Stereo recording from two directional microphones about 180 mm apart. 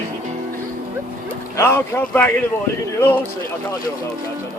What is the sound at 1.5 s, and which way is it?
Speech, 15° left (ahead or behind).